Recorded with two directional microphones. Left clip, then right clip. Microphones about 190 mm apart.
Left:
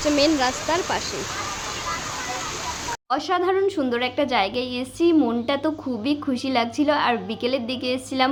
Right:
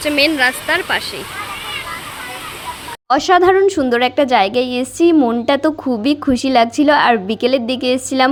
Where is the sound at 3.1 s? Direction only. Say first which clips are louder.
Right 11 dB; 40° right (ahead or behind).